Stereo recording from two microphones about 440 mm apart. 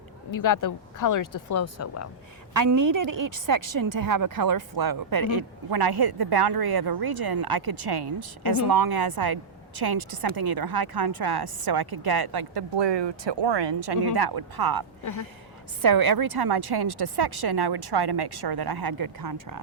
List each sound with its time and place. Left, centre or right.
0.3 s speech: left
2.6 s a woman's voice: right
15.0 s speech: left
15.8 s speech: right